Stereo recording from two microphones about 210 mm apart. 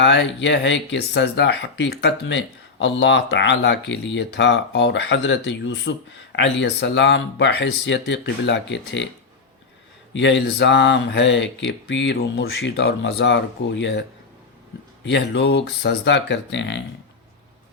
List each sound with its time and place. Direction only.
0.0 s speech: 60° left (ahead or behind)
10.1 s speech: 55° left (ahead or behind)
15.0 s speech: 55° left (ahead or behind)